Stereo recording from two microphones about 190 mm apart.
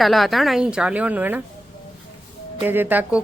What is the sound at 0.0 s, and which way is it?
A woman's voice, centre (ahead or behind).